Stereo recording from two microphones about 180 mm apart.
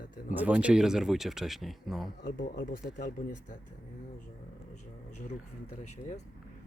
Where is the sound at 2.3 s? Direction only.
50° left (ahead or behind).